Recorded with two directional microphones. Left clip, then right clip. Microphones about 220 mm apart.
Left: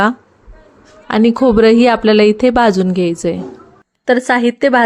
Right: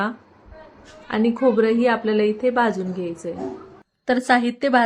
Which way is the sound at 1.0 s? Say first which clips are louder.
Left 8 dB; 45° left (ahead or behind).